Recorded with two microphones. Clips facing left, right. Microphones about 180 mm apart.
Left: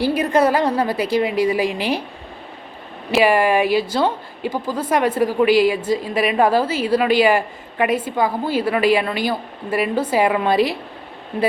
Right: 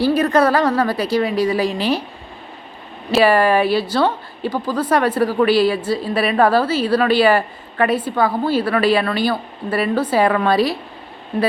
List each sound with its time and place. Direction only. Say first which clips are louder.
0.0 s a woman's voice: right 2 dB; 15° left (ahead or behind)
3.1 s a woman's voice: right 2 dB; 15° left (ahead or behind)